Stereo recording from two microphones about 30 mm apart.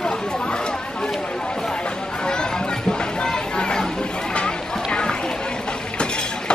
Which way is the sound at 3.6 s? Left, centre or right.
Left.